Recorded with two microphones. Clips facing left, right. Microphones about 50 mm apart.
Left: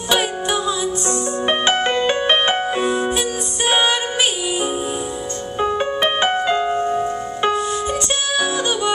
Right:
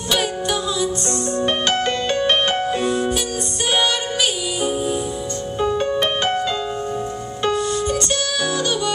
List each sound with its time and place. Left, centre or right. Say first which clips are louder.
0.1 s music: left 2 dB; centre